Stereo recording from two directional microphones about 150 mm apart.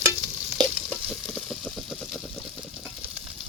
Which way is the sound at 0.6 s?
5° left (ahead or behind).